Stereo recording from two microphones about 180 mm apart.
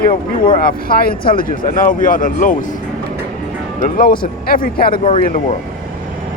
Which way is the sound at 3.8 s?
50° left (ahead or behind).